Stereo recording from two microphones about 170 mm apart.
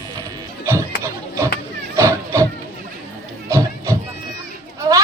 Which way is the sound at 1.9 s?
15° right (ahead or behind).